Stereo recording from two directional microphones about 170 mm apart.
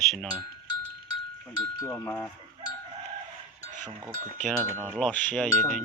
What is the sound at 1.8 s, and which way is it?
Speech, 20° left (ahead or behind).